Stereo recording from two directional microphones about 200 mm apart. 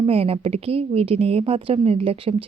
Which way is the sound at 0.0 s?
30° right (ahead or behind).